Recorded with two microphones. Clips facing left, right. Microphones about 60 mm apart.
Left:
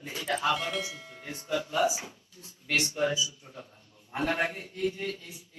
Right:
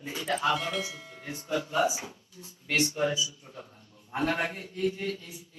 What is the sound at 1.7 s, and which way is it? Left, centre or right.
Speech, centre.